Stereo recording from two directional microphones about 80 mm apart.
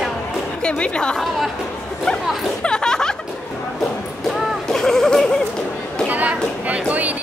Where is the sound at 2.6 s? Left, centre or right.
Centre.